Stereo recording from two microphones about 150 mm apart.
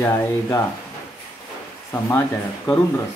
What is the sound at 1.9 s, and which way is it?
Speech, 15° left (ahead or behind).